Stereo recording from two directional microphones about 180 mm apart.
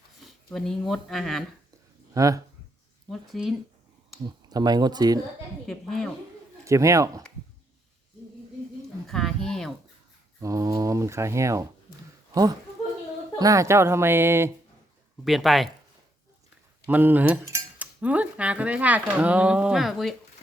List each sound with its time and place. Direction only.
0.2 s speech: centre (ahead or behind)
2.1 s speech: 20° right (ahead or behind)
3.1 s speech: centre (ahead or behind)
4.3 s speech: 20° right (ahead or behind)
5.6 s speech: centre (ahead or behind)
6.7 s cutlery: 15° right (ahead or behind)
9.0 s a sound: centre (ahead or behind)
10.4 s cutlery: 20° right (ahead or behind)
13.4 s cutlery: 20° right (ahead or behind)
15.2 s speech: centre (ahead or behind)
16.8 s cutlery: 10° right (ahead or behind)